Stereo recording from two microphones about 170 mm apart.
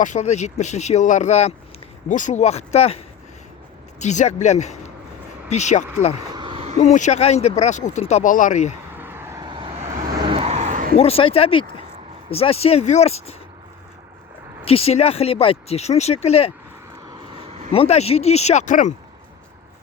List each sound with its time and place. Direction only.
0.0 s speech: 45° left (ahead or behind)
4.0 s speech: 45° left (ahead or behind)
6.3 s a sound: 30° right (ahead or behind)
6.8 s speech: 45° left (ahead or behind)
9.0 s vehicle: 15° right (ahead or behind)
9.5 s vehicle: 25° right (ahead or behind); by 10.9 s 45° right (ahead or behind)
10.9 s speech: 35° left (ahead or behind)
14.6 s speech: 35° left (ahead or behind)
17.1 s vehicle: 35° right (ahead or behind)
17.7 s speech: 35° left (ahead or behind)